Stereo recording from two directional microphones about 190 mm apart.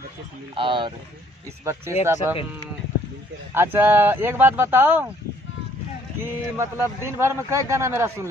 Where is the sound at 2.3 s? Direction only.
10° right (ahead or behind).